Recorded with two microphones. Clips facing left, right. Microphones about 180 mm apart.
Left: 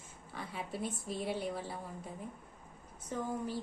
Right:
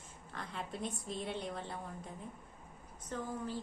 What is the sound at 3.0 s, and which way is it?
Speech, 10° left (ahead or behind).